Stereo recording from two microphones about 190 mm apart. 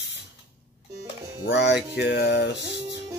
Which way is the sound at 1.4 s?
65° left (ahead or behind).